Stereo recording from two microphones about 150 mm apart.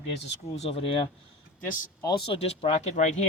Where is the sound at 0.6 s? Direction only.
40° left (ahead or behind).